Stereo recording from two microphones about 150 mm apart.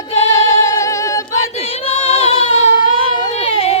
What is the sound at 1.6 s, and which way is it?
Female singing, 40° left (ahead or behind).